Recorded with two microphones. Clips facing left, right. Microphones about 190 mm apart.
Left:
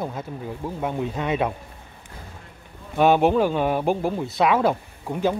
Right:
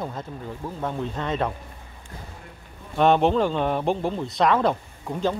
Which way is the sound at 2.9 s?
5° left (ahead or behind).